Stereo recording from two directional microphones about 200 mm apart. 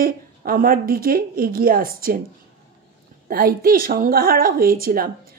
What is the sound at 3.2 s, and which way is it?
A woman's voice, 45° right (ahead or behind).